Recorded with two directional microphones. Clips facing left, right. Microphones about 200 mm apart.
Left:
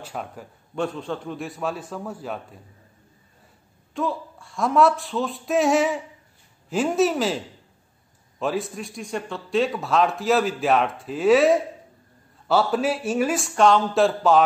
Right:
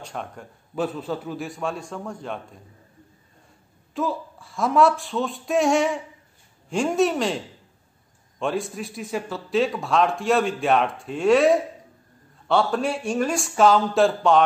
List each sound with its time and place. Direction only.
0.0 s speech: 5° left (ahead or behind)
3.9 s speech: centre (ahead or behind)
8.4 s speech: centre (ahead or behind)